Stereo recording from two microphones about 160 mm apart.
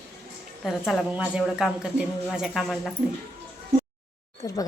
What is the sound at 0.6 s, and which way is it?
A woman's voice, centre (ahead or behind).